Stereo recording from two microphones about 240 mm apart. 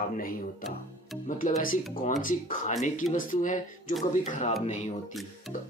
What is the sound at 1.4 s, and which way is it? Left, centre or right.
Speech, left.